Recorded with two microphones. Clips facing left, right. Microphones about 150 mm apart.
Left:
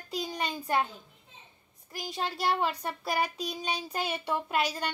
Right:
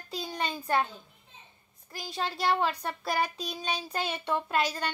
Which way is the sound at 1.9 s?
15° left (ahead or behind).